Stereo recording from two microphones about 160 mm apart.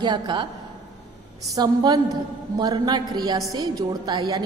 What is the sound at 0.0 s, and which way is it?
Speech, 30° right (ahead or behind).